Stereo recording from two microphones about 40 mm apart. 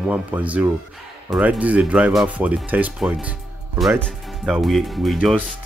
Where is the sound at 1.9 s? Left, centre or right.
Right.